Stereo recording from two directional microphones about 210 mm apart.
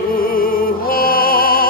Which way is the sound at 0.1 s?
45° left (ahead or behind).